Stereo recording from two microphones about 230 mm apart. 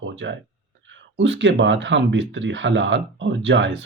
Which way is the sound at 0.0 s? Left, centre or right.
Right.